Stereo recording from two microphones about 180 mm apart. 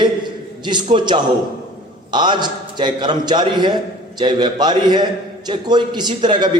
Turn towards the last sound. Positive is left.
turn(degrees=-25)  # may be behind; listen again after turning